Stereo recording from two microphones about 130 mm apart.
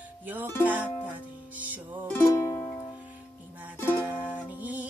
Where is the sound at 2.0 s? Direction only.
20° left (ahead or behind).